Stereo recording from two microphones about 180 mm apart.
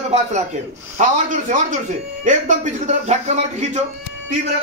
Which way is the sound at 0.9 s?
45° right (ahead or behind).